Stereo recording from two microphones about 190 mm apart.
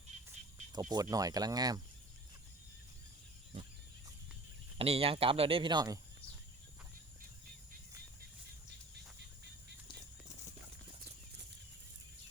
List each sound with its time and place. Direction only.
0.7 s speech: 20° right (ahead or behind)
4.8 s speech: 30° right (ahead or behind)